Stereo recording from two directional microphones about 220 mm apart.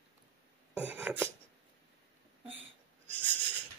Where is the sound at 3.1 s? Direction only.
10° left (ahead or behind).